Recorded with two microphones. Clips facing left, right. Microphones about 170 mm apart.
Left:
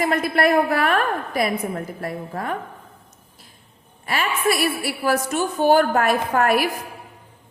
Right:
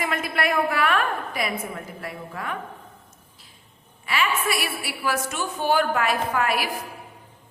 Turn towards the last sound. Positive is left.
turn(degrees=50)  # may be behind; listen again after turning